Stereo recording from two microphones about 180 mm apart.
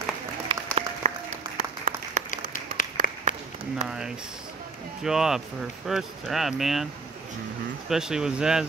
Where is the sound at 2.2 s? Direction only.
45° left (ahead or behind).